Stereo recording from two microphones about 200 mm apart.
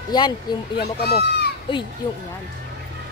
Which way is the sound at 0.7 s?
50° left (ahead or behind).